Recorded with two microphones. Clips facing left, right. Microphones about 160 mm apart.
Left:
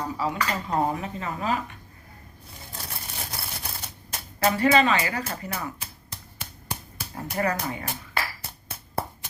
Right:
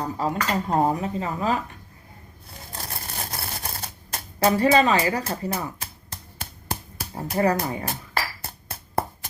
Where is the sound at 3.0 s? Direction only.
50° right (ahead or behind).